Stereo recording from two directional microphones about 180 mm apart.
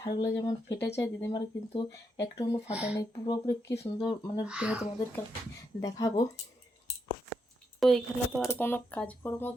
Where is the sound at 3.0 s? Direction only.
20° left (ahead or behind).